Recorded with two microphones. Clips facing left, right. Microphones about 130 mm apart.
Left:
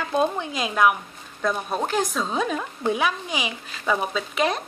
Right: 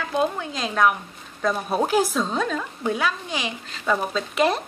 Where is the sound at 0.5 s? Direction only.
5° left (ahead or behind).